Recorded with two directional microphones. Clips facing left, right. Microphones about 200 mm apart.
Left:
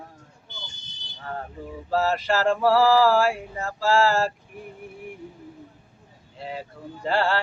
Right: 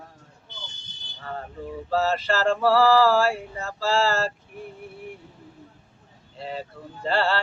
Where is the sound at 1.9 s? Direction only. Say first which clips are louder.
Left 1 dB; 10° left (ahead or behind).